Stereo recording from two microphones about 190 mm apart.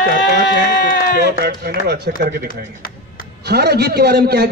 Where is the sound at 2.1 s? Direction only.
50° left (ahead or behind).